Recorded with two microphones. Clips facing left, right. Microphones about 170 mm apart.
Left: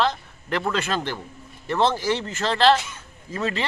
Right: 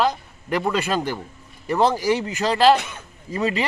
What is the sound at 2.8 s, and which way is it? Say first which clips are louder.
Speech: right 3 dB; 60° right (ahead or behind).